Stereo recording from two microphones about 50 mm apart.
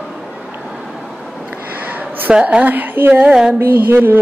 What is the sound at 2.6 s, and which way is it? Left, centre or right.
Speech, right.